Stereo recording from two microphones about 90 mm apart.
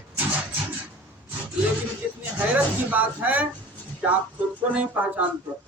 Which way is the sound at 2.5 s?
15° right (ahead or behind).